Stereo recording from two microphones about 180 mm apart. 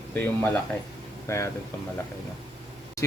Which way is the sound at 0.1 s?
10° left (ahead or behind).